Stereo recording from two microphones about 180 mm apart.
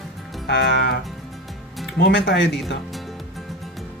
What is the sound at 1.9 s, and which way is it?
Speech, 70° left (ahead or behind).